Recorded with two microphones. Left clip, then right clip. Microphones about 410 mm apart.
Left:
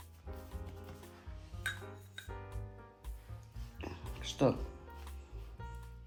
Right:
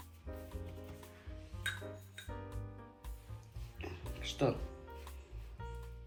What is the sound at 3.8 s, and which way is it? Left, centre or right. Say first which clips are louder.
Music: even; left.